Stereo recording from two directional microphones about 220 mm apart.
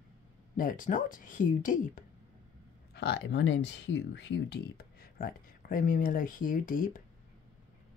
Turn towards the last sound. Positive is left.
turn(degrees=40)  # may be behind; listen again after turning